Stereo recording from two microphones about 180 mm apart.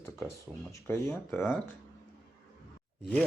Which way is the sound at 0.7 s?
15° left (ahead or behind).